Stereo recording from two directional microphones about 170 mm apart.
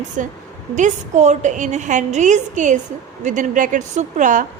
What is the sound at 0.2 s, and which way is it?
A woman's voice, 50° right (ahead or behind).